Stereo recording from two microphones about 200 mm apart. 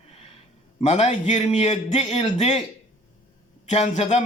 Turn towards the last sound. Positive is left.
turn(degrees=30)  # may be behind; listen again after turning